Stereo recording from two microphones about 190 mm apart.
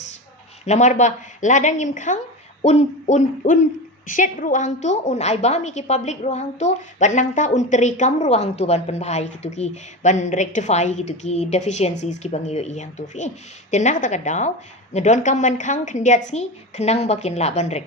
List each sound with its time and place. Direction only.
0.6 s a woman's voice: 40° left (ahead or behind)